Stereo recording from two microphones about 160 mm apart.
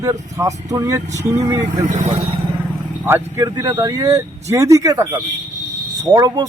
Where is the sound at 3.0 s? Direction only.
15° right (ahead or behind).